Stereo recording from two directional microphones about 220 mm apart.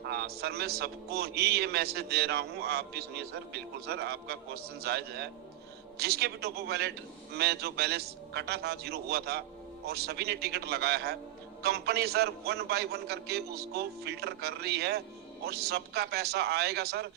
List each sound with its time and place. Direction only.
0.1 s a man's voice: 45° right (ahead or behind)